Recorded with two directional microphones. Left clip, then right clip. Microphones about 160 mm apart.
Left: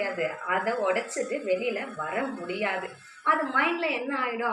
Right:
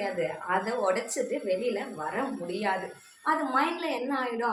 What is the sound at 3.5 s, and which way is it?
Speech, 30° right (ahead or behind).